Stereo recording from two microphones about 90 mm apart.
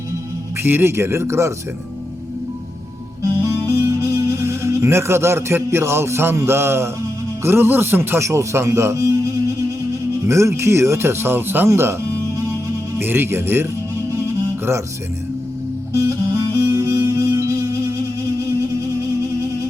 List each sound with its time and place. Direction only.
0.6 s speech: 25° right (ahead or behind)
3.2 s music: 30° right (ahead or behind)
7.4 s speech: 25° right (ahead or behind)
13.0 s speech: 25° right (ahead or behind)
16.0 s music: 35° right (ahead or behind)